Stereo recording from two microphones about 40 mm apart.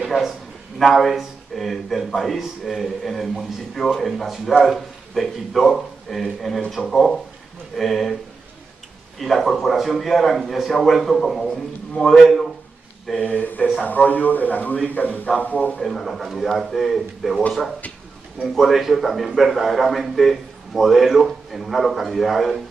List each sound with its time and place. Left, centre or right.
0.0 s a man's voice: centre
9.2 s speech: centre
11.4 s a man's voice: centre
12.2 s speech: centre
13.2 s a man's voice: left
15.8 s speech: centre
18.4 s speech: centre